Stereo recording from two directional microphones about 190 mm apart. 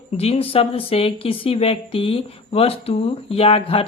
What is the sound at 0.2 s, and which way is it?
Speech, 30° left (ahead or behind).